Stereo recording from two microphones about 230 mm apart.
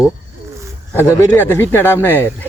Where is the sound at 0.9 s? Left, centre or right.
Centre.